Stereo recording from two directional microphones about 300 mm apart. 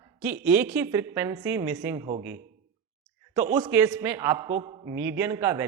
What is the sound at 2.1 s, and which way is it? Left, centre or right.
Speech, right.